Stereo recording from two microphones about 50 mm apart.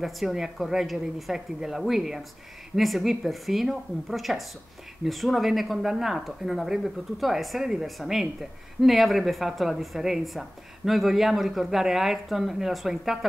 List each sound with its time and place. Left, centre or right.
0.0 s speech: centre